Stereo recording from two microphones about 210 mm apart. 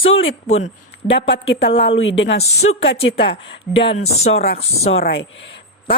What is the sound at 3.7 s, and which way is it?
Speech, 25° left (ahead or behind).